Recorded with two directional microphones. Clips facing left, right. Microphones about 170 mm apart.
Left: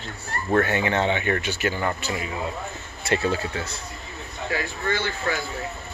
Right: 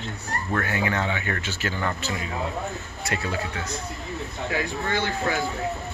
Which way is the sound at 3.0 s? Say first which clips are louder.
Left 5 dB; 30° left (ahead or behind).